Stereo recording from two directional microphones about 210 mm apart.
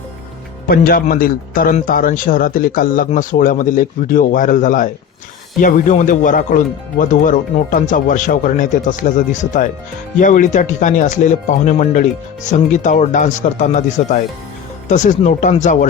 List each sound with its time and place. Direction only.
0.7 s a man's voice: 40° left (ahead or behind)